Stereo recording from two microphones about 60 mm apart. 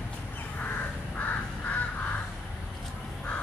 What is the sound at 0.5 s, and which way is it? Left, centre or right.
Crow, left.